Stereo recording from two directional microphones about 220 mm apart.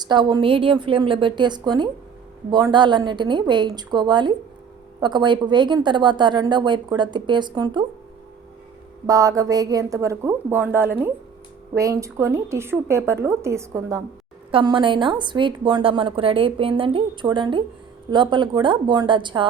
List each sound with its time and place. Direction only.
0.0 s a woman's voice: 20° right (ahead or behind)
9.0 s a woman's voice: 15° right (ahead or behind)